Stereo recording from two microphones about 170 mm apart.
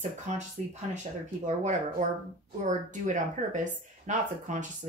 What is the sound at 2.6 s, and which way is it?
Speech, 45° right (ahead or behind).